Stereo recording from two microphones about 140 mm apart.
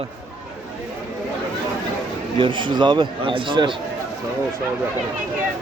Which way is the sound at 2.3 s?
35° right (ahead or behind).